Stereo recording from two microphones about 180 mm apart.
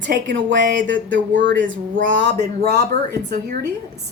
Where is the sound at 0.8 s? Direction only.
90° right.